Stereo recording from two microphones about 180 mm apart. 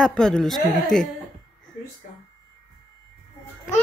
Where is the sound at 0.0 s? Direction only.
5° left (ahead or behind).